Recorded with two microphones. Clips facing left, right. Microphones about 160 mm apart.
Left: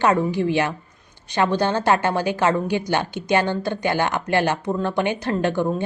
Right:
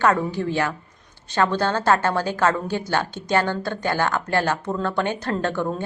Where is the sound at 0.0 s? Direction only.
15° left (ahead or behind).